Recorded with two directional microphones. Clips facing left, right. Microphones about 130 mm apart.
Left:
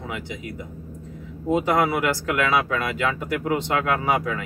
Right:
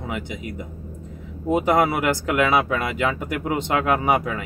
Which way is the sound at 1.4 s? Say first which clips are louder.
Right 2 dB; 20° right (ahead or behind).